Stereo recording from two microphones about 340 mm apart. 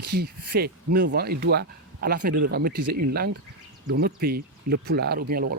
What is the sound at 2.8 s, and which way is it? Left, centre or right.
Speech, right.